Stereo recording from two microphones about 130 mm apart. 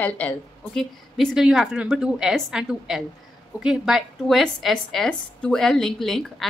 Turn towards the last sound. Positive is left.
turn(degrees=0)  # may be behind; listen again after turning